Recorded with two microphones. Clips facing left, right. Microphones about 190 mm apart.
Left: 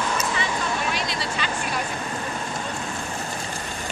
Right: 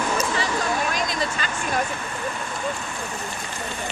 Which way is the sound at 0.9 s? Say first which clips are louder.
Right 2 dB; 45° right (ahead or behind).